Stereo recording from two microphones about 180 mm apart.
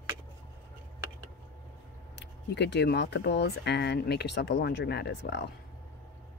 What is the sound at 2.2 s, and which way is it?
Speech, 75° left (ahead or behind).